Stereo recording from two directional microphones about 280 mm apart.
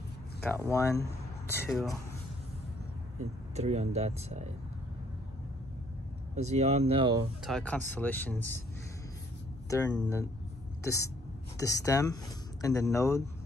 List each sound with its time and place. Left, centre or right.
0.4 s speech: centre
3.5 s speech: right
6.3 s speech: right
7.4 s speech: centre
9.7 s a woman's voice: centre